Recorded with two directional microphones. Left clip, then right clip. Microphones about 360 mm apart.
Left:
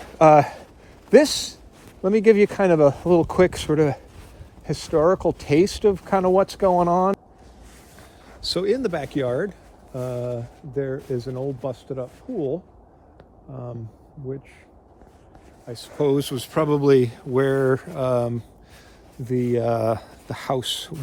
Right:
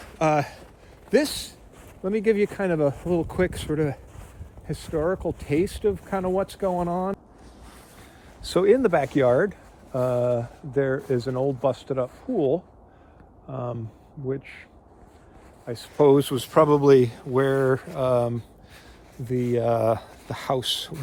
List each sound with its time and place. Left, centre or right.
0.2 s speech: left
8.4 s speech: centre
13.5 s speech: right
15.6 s speech: centre